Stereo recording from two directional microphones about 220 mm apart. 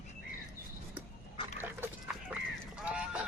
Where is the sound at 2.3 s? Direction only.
5° right (ahead or behind).